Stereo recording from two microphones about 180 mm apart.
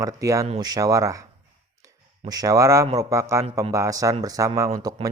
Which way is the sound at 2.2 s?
20° right (ahead or behind).